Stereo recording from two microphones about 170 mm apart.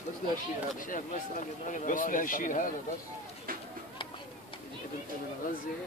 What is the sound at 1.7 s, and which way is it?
Speech, 50° left (ahead or behind).